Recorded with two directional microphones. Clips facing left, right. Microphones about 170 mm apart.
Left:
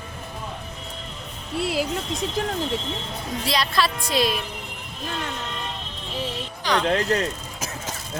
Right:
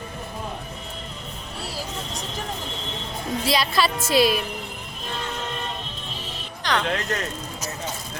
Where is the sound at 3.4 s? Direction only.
Centre (ahead or behind).